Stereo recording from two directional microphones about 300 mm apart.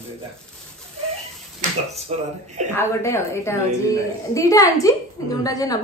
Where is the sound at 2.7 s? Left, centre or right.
Centre.